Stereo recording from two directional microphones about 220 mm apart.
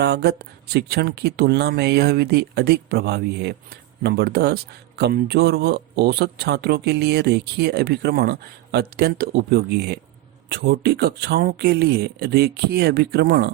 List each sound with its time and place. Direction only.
0.0 s speech: 50° right (ahead or behind)